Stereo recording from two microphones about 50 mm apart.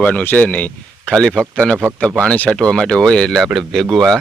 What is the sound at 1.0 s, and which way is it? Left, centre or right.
Speech, centre.